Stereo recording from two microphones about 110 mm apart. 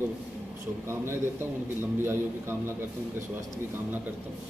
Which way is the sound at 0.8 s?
25° right (ahead or behind).